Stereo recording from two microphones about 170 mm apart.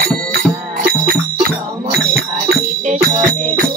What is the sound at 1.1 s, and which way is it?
Music, 60° right (ahead or behind).